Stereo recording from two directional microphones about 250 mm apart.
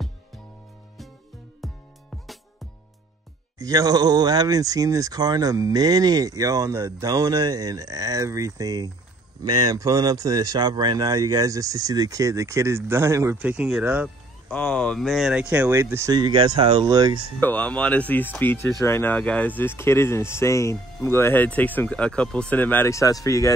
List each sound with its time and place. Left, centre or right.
1.6 s music: centre
3.5 s speech: centre
15.5 s speech: centre
17.4 s speech: centre